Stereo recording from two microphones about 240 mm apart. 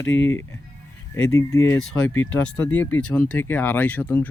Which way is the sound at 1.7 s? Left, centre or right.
Left.